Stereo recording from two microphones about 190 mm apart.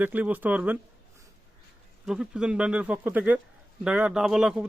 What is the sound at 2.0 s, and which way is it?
Speech, 5° right (ahead or behind).